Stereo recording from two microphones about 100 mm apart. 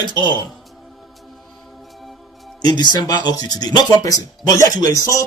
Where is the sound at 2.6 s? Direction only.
45° left (ahead or behind).